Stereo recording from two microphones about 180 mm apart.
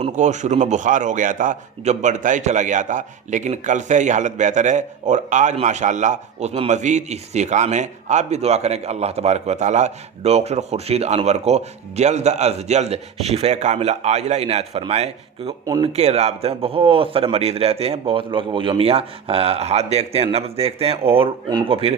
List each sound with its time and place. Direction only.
0.0 s a man's voice: 40° right (ahead or behind)
15.6 s speech: 20° right (ahead or behind)
15.9 s a man's voice: 35° right (ahead or behind)